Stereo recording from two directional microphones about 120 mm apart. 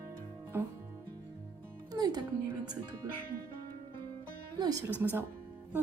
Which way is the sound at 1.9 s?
35° right (ahead or behind).